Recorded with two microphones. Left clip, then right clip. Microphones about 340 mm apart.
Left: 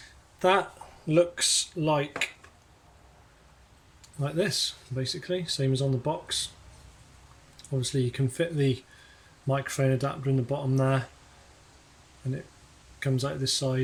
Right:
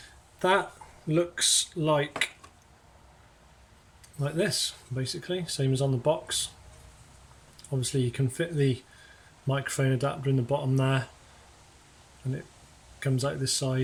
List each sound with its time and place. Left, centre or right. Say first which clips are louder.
0.3 s speech: left 1 dB; centre
4.2 s speech: left 1 dB; centre
7.5 s speech: even; centre
13.0 s speech: even; centre